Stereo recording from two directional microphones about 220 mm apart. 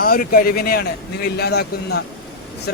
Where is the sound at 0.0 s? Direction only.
40° left (ahead or behind).